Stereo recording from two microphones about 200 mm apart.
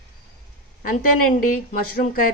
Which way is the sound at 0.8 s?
45° left (ahead or behind).